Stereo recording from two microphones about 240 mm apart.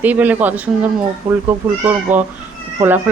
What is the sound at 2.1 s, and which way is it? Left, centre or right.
Speech, centre.